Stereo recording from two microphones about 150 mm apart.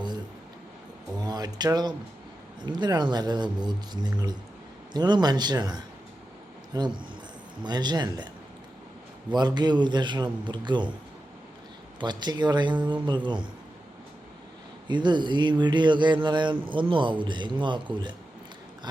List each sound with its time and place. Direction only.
1.1 s speech: 25° right (ahead or behind)
9.3 s speech: 30° right (ahead or behind)
11.9 s speech: 30° right (ahead or behind)
14.8 s speech: 30° right (ahead or behind)